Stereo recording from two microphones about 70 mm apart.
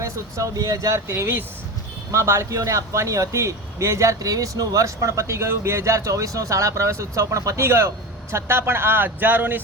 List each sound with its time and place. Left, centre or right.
0.0 s a man's voice: right